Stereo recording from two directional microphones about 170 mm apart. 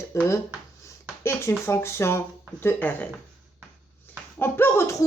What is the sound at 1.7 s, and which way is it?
Speech, 15° left (ahead or behind).